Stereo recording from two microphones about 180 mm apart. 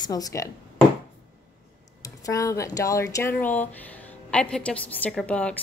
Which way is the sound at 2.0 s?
20° left (ahead or behind).